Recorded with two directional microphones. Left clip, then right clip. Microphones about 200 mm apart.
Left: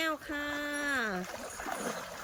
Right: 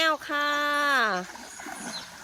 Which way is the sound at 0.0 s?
10° left (ahead or behind).